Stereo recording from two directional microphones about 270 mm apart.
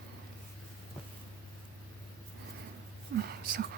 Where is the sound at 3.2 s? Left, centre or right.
Right.